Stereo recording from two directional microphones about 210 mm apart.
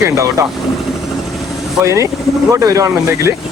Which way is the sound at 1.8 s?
15° right (ahead or behind).